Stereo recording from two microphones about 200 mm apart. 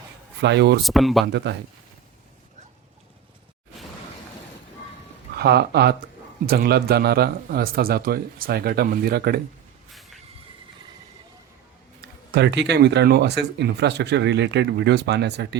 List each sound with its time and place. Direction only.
0.4 s speech: 60° right (ahead or behind)
0.9 s speech: centre (ahead or behind)
1.2 s speech: 60° right (ahead or behind)
5.4 s speech: 55° right (ahead or behind)
12.3 s speech: 60° right (ahead or behind)